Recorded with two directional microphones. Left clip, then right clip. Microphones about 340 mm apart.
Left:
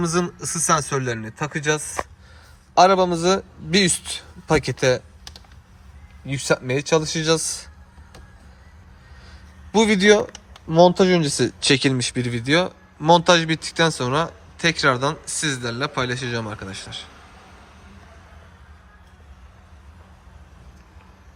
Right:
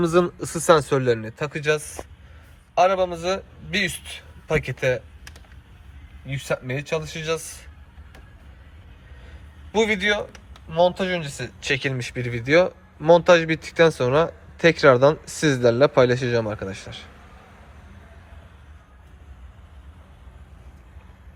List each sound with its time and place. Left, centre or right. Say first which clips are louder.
0.0 s speech: right 4 dB; centre
2.7 s a man's voice: left 4 dB; centre
6.2 s a man's voice: left 5 dB; centre
9.7 s a man's voice: left 5 dB; centre